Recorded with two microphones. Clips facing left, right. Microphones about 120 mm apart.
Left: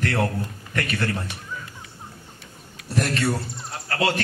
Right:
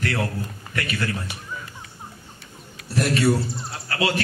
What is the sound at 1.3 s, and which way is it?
Speech, 5° right (ahead or behind).